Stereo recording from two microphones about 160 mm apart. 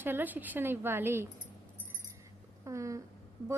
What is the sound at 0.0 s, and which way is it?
A woman's voice, 10° right (ahead or behind).